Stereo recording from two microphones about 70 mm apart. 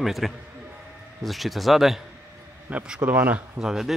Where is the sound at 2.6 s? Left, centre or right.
Centre.